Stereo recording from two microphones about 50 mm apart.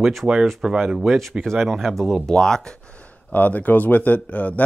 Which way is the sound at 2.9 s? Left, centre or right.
Left.